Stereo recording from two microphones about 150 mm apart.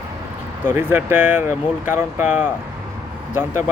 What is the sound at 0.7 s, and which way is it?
Speech, 15° right (ahead or behind).